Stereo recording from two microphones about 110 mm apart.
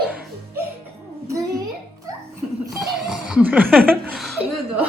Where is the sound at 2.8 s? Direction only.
5° right (ahead or behind).